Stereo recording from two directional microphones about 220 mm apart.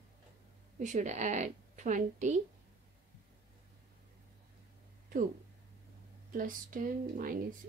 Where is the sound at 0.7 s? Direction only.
35° right (ahead or behind).